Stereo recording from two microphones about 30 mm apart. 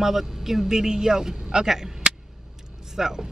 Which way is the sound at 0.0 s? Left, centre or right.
Centre.